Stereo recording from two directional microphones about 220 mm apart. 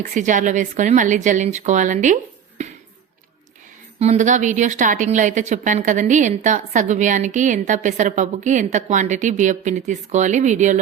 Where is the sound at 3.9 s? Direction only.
30° right (ahead or behind).